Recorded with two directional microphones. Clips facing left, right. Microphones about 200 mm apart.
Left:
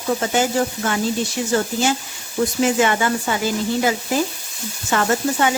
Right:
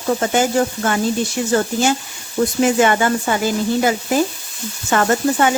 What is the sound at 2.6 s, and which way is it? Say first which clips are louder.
Speech: right 3 dB; 50° right (ahead or behind).